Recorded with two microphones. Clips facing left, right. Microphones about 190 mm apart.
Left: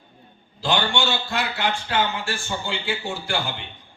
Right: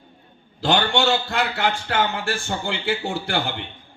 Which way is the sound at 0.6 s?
60° right (ahead or behind).